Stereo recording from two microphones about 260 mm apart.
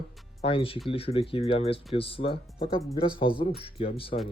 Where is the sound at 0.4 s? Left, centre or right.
Left.